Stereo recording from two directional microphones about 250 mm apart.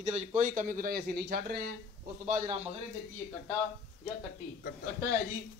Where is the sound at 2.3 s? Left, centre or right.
Right.